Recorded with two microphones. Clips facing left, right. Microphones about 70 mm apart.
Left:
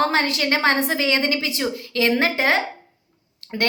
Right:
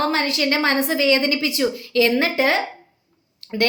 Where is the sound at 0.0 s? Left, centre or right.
Left.